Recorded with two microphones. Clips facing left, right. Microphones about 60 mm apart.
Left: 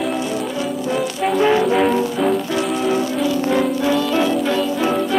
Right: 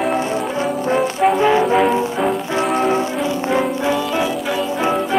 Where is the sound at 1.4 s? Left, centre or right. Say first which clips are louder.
Left 2 dB; centre.